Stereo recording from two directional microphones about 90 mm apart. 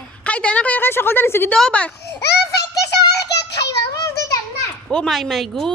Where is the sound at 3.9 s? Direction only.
35° left (ahead or behind).